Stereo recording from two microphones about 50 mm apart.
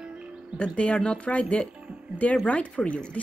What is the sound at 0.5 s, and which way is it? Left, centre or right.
Speech, left.